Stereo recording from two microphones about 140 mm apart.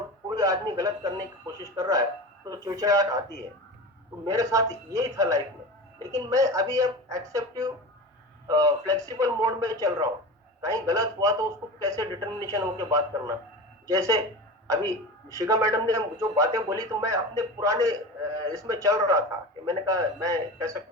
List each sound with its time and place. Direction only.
0.3 s a man's voice: 25° right (ahead or behind)
4.3 s a man's voice: 25° right (ahead or behind)